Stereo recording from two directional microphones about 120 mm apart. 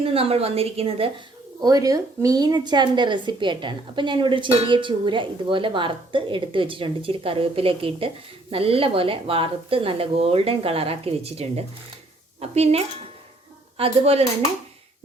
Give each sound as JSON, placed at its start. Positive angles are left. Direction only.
{"t": 0.0, "sound": "a woman's voice", "side_deg": -50}
{"t": 1.6, "sound": "a woman's voice", "side_deg": -30}